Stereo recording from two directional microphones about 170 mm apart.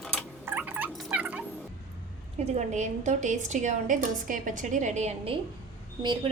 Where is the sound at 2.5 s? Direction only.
45° right (ahead or behind).